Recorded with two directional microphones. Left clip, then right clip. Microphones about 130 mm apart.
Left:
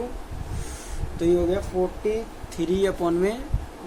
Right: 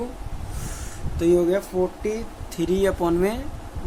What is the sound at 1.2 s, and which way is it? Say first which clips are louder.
Speech: right 3 dB; 45° right (ahead or behind).